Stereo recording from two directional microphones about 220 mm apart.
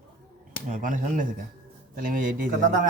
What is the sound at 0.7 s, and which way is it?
A man's voice, 35° right (ahead or behind).